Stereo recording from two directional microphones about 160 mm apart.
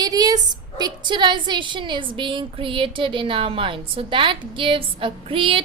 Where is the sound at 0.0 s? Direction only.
25° right (ahead or behind).